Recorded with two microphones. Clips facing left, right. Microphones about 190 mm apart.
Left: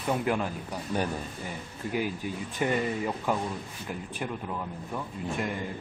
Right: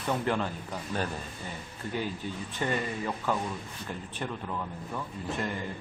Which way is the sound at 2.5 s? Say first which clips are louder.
Left 4 dB; 15° left (ahead or behind).